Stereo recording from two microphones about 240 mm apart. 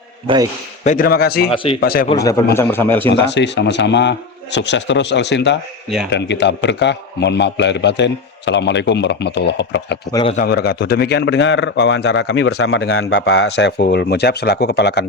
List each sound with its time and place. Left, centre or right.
0.9 s speech: left
1.5 s speech: left
1.8 s speech: left
2.0 s a man's voice: centre
3.1 s a man's voice: left
10.1 s a man's voice: centre
10.3 s a man's voice: left
12.5 s a man's voice: left